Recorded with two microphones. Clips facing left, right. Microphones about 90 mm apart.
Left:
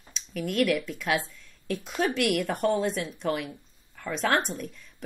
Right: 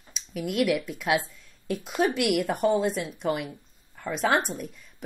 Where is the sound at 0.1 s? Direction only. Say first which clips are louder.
Even; 10° right (ahead or behind).